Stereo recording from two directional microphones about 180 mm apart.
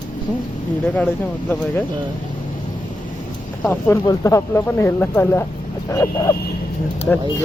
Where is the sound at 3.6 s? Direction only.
10° left (ahead or behind).